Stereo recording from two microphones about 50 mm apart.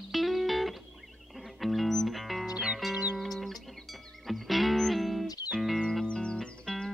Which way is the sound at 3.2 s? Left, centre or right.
Centre.